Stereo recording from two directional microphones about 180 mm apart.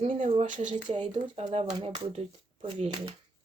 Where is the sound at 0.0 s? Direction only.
45° right (ahead or behind).